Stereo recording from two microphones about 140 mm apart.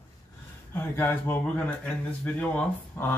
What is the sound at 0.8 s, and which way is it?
Speech, 15° left (ahead or behind).